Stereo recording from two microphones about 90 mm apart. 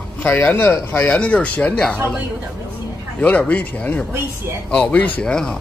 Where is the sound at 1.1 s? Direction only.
10° left (ahead or behind).